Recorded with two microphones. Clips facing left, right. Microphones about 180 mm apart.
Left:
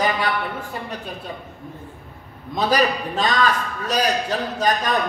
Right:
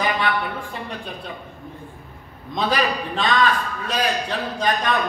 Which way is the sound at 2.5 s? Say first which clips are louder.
Left 2 dB; 40° left (ahead or behind).